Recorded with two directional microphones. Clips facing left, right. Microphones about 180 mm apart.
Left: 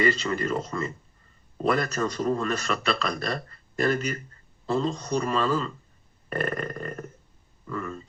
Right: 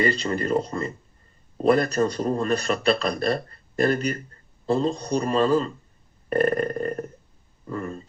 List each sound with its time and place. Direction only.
0.0 s speech: 40° right (ahead or behind)